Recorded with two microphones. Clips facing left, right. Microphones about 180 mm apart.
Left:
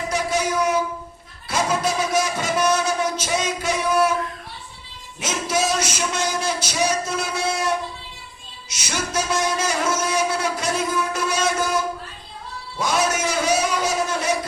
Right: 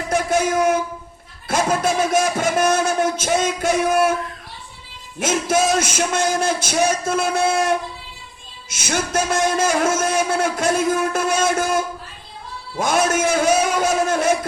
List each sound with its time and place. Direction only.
0.1 s a sound: 50° right (ahead or behind)
1.5 s a man's voice: 50° right (ahead or behind)
5.2 s a man's voice: 50° right (ahead or behind)